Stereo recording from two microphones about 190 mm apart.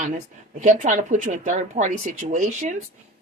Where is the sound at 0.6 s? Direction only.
40° right (ahead or behind).